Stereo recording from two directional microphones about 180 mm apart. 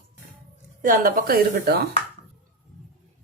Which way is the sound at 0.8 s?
50° right (ahead or behind).